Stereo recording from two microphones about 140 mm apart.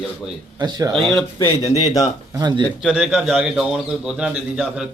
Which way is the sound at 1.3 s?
20° left (ahead or behind).